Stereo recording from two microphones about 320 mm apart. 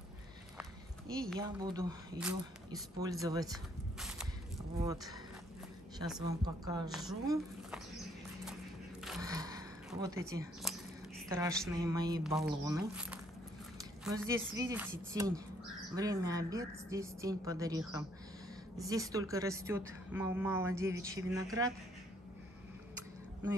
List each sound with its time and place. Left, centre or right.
1.4 s speech: centre
4.0 s a sound: centre
6.0 s a woman's voice: centre
6.9 s speech: centre
9.2 s a sound: centre
11.2 s a woman's voice: centre